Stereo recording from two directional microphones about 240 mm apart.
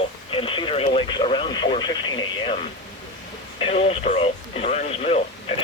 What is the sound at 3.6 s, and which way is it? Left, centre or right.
Radio, left.